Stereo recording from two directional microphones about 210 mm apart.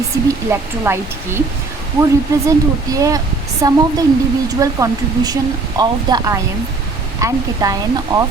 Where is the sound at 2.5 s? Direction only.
15° right (ahead or behind).